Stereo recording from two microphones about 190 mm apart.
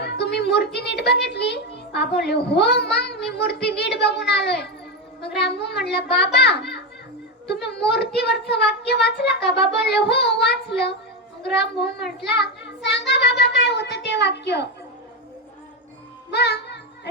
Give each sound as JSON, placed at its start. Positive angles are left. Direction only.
{"t": 0.0, "sound": "a sound", "side_deg": 60}
{"t": 1.9, "sound": "a child's voice", "side_deg": 60}
{"t": 12.2, "sound": "child singing", "side_deg": 60}
{"t": 16.3, "sound": "music", "side_deg": 60}